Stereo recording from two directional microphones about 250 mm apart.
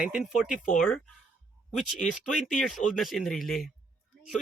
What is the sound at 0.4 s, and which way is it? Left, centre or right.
Speech, left.